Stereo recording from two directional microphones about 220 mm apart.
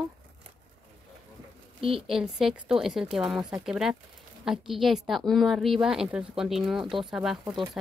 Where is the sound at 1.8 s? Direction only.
25° right (ahead or behind).